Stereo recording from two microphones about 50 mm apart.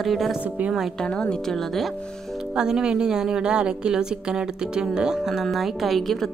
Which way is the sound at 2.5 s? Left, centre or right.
Centre.